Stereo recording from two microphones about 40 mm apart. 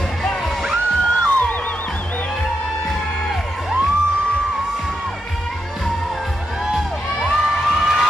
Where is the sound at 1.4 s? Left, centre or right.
Left.